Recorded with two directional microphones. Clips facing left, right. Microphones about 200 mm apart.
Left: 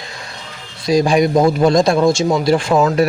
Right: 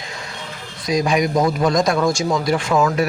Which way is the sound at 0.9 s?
30° left (ahead or behind).